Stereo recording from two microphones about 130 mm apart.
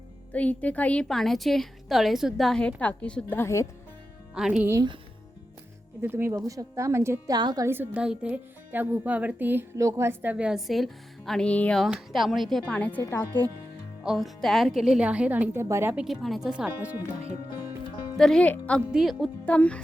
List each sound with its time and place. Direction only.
0.3 s a woman's voice: 10° left (ahead or behind)
4.4 s a woman's voice: 5° right (ahead or behind)
6.0 s a woman's voice: 20° right (ahead or behind)
7.3 s a woman's voice: 30° right (ahead or behind)
7.7 s speech: 10° right (ahead or behind); by 11.8 s 10° left (ahead or behind)
11.8 s a woman's voice: centre (ahead or behind); by 13.2 s 20° left (ahead or behind)
14.0 s a woman's voice: 5° right (ahead or behind)
16.0 s speech: centre (ahead or behind)
18.2 s a woman's voice: 5° left (ahead or behind)
18.9 s a woman's voice: centre (ahead or behind)
19.5 s a woman's voice: 10° left (ahead or behind)